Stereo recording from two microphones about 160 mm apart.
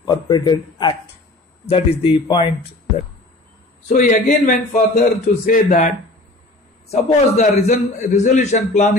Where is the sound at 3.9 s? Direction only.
50° left (ahead or behind).